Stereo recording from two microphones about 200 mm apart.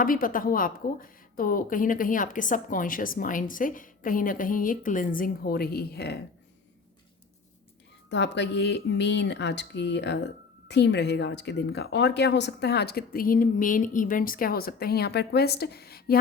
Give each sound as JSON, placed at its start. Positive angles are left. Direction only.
{"t": 0.0, "sound": "a woman's voice", "side_deg": 45}
{"t": 8.1, "sound": "a woman's voice", "side_deg": 60}